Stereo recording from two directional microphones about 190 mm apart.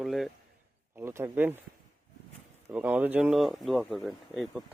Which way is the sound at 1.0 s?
15° right (ahead or behind).